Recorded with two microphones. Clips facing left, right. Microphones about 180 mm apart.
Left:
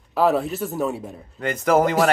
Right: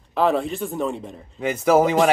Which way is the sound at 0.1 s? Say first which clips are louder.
Left 1 dB; 5° left (ahead or behind).